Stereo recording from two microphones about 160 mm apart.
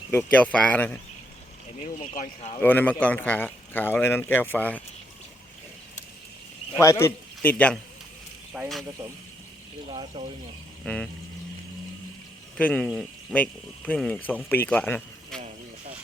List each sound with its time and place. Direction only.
0.1 s speech: 10° left (ahead or behind)
1.8 s speech: 45° left (ahead or behind)
2.6 s speech: 10° left (ahead or behind)
6.7 s speech: 15° left (ahead or behind)
8.5 s speech: 5° right (ahead or behind)
9.9 s speech: 35° right (ahead or behind)
10.8 s speech: 5° left (ahead or behind)
12.5 s speech: 5° left (ahead or behind)